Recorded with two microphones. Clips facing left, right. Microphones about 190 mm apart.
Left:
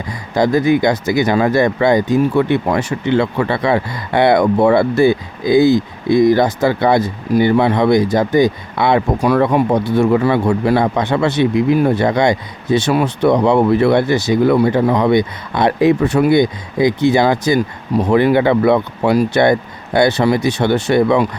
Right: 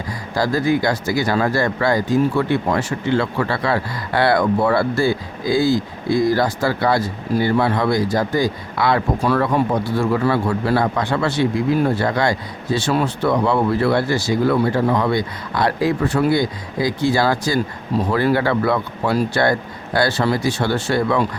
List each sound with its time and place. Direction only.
0.1 s speech: 20° left (ahead or behind)